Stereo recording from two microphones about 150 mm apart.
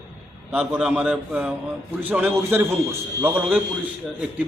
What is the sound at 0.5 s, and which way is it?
A man's voice, 5° right (ahead or behind).